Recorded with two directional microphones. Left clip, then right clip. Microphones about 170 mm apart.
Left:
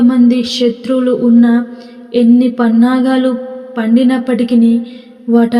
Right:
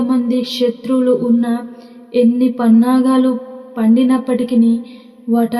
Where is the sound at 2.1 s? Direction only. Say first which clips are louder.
Left 3 dB; 25° left (ahead or behind).